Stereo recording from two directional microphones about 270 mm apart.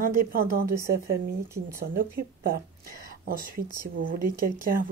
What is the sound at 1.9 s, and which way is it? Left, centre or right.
Speech, right.